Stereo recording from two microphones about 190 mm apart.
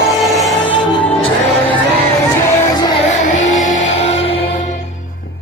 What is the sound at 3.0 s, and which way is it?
Music, 40° left (ahead or behind).